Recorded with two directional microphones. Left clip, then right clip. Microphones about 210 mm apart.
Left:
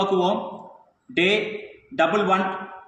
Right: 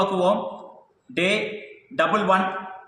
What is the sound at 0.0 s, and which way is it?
A man's voice, 15° right (ahead or behind).